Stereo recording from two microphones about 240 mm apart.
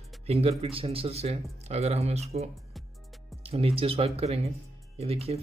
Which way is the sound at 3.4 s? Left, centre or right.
Right.